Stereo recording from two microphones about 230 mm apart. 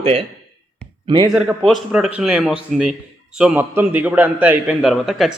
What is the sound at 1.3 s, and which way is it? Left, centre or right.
Speech, centre.